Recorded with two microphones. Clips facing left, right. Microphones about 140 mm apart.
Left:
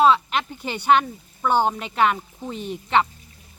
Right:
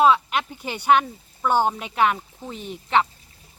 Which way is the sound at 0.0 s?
5° right (ahead or behind).